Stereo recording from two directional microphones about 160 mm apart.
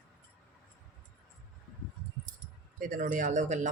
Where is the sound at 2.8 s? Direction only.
60° right (ahead or behind).